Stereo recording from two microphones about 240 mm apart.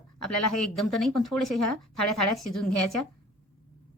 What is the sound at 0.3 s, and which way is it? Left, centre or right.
Speech, left.